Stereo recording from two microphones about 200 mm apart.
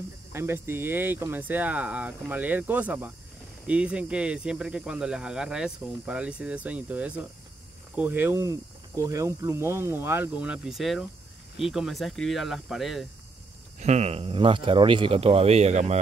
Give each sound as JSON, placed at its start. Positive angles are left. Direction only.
{"t": 0.3, "sound": "speech", "side_deg": -10}
{"t": 13.7, "sound": "speech", "side_deg": -35}